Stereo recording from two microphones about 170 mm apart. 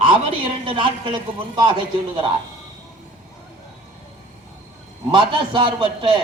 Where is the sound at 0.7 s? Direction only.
30° right (ahead or behind).